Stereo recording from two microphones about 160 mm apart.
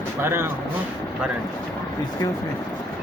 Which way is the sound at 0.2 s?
15° right (ahead or behind).